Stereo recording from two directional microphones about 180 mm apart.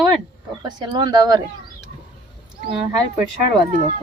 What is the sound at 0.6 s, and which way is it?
Speech, 25° right (ahead or behind).